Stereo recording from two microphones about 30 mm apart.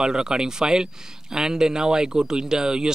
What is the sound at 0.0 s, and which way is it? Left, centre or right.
Speech, right.